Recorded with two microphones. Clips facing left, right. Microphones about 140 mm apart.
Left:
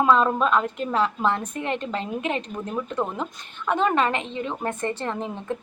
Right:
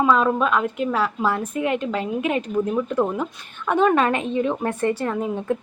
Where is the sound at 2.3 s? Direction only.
5° right (ahead or behind).